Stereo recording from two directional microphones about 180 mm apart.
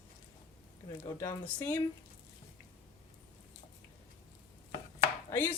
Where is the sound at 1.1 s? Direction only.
15° left (ahead or behind).